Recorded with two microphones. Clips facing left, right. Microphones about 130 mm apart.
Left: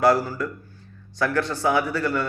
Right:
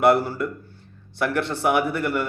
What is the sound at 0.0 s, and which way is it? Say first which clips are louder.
Speech: right 1 dB; 25° right (ahead or behind).